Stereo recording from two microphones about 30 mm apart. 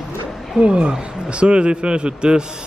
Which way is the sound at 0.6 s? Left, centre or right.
Right.